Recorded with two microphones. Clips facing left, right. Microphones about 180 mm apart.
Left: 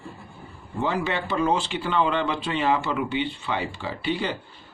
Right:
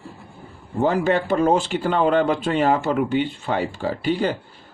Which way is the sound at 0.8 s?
45° right (ahead or behind).